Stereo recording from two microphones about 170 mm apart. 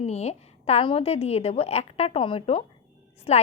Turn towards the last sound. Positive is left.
turn(degrees=40)  # may be behind; listen again after turning